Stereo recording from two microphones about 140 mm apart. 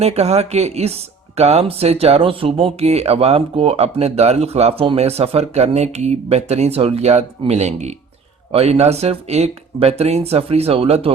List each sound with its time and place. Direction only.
0.0 s speech: 50° right (ahead or behind)